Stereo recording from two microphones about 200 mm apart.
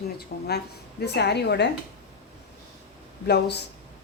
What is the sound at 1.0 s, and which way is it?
Speech, 55° left (ahead or behind).